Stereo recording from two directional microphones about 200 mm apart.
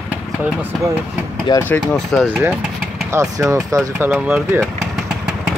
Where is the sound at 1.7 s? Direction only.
10° left (ahead or behind).